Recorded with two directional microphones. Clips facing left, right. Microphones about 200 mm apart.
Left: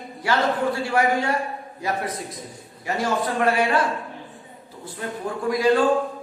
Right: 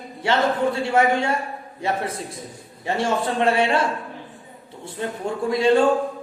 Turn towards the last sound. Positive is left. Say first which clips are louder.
# right 2 dB
turn(degrees=-25)  # may be behind; listen again after turning